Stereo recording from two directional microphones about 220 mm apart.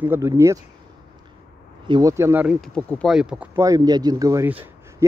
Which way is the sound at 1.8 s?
20° right (ahead or behind).